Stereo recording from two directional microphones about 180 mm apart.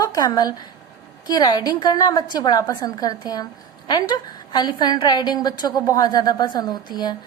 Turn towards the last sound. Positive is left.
turn(degrees=20)  # may be behind; listen again after turning